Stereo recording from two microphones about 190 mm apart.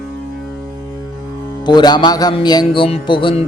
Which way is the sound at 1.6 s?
20° left (ahead or behind).